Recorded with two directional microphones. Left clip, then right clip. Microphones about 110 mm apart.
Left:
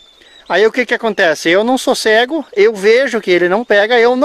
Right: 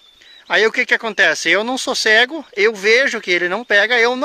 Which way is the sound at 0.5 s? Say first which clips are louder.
Left 3 dB; 35° left (ahead or behind).